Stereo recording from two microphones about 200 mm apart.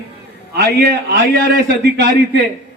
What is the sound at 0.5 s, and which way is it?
Speech, 55° right (ahead or behind).